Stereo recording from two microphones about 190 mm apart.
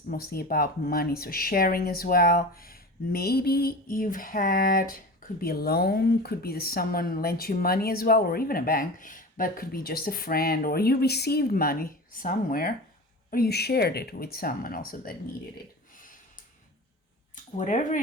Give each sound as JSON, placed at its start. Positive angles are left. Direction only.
{"t": 0.1, "sound": "speech", "side_deg": 50}
{"t": 16.0, "sound": "a sound", "side_deg": 45}
{"t": 17.6, "sound": "speech", "side_deg": 40}